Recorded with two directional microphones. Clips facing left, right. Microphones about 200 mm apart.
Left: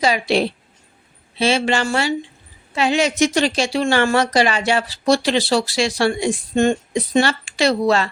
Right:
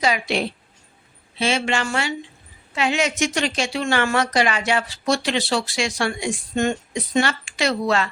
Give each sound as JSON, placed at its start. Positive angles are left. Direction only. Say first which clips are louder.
{"t": 0.0, "sound": "a woman's voice", "louder": "left 4 dB", "side_deg": 35}